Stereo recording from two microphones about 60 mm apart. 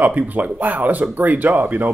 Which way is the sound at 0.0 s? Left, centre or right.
Right.